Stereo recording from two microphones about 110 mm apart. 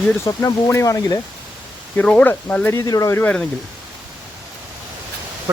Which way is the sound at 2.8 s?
30° left (ahead or behind).